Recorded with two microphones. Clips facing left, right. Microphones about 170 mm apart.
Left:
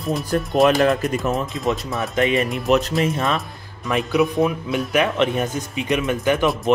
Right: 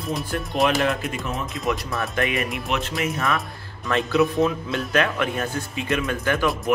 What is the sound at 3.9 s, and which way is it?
Speech, 15° left (ahead or behind).